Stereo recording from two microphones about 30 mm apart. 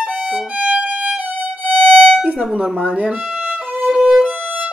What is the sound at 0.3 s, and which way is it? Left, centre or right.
Violin, right.